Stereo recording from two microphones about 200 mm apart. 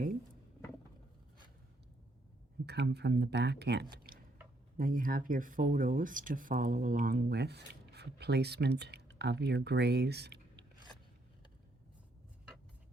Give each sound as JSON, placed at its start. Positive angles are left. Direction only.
{"t": 2.6, "sound": "speech", "side_deg": -55}
{"t": 4.1, "sound": "squish", "side_deg": -50}
{"t": 4.8, "sound": "speech", "side_deg": -45}